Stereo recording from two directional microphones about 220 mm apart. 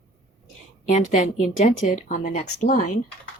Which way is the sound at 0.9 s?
35° left (ahead or behind).